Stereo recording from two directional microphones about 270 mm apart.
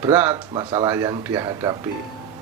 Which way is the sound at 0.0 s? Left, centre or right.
Centre.